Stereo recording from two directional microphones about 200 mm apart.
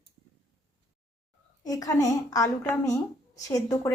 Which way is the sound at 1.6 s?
20° left (ahead or behind).